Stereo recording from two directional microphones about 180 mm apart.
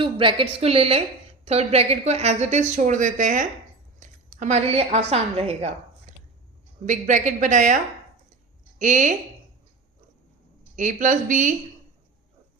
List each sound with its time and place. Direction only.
0.0 s a woman's voice: 30° right (ahead or behind); by 7.8 s 45° right (ahead or behind)
8.8 s a woman's voice: 45° right (ahead or behind)
10.8 s a woman's voice: 45° right (ahead or behind)